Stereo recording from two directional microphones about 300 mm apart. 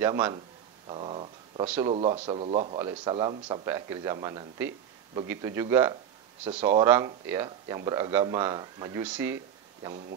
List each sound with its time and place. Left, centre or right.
0.0 s a man's voice: centre